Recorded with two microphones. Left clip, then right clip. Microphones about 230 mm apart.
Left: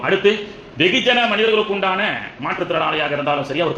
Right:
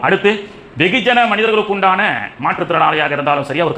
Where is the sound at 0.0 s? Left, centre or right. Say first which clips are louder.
Right 3 dB; right.